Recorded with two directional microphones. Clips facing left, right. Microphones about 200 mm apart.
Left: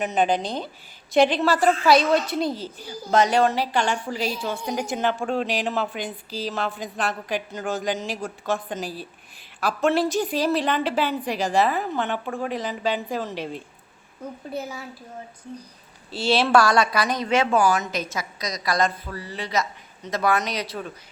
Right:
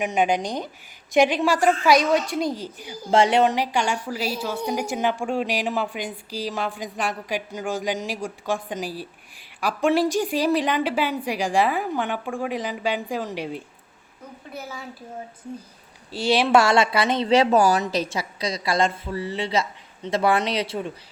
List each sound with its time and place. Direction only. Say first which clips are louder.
0.0 s a woman's voice: even; 15° right (ahead or behind)
3.1 s a woman's voice: right 1 dB; 25° right (ahead or behind)
16.1 s a woman's voice: right 1 dB; 15° right (ahead or behind)